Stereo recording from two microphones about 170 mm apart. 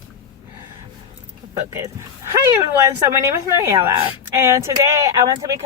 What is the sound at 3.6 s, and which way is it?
A woman's voice, 15° right (ahead or behind).